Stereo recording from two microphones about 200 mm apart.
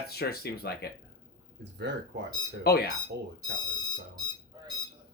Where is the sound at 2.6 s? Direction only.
50° left (ahead or behind).